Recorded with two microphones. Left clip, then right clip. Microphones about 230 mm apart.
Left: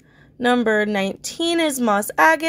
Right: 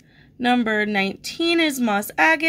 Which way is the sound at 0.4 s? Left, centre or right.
Centre.